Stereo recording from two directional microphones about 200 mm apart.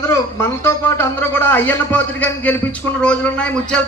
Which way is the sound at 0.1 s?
10° left (ahead or behind).